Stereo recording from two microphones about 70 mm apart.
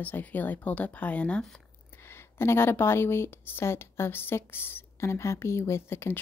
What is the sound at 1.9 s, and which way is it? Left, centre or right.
A woman's voice, left.